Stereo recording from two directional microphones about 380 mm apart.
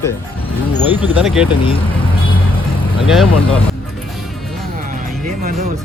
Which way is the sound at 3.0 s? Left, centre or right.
Centre.